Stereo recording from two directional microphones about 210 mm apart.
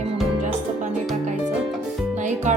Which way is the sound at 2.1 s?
35° right (ahead or behind).